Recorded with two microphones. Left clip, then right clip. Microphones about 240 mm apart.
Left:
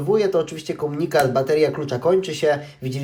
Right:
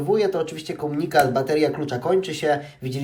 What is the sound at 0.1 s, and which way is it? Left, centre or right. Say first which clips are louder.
Speech: left 3 dB; centre.